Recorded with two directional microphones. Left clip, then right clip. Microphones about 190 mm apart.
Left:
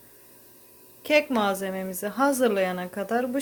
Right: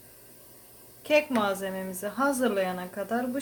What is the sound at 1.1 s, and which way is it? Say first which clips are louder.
A woman's voice: left 2 dB; 40° left (ahead or behind).